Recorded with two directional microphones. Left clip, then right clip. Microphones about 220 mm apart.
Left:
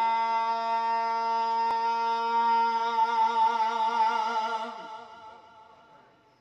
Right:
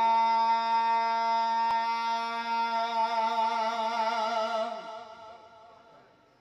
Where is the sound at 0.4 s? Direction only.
40° left (ahead or behind).